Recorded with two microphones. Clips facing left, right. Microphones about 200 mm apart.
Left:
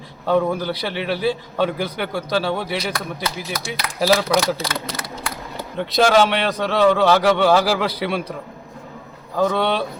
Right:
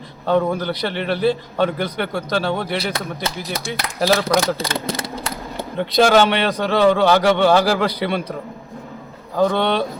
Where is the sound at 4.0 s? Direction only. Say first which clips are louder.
Even; centre (ahead or behind).